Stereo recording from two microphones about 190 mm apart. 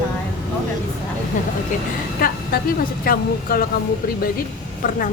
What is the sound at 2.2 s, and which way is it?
A woman's voice, 50° left (ahead or behind).